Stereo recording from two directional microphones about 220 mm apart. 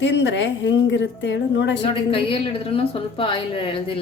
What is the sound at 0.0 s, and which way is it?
A woman's voice, 55° left (ahead or behind).